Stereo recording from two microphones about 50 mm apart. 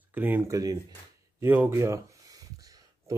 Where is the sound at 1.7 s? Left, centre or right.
Right.